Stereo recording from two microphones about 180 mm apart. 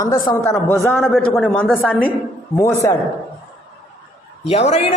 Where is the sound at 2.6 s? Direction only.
15° left (ahead or behind).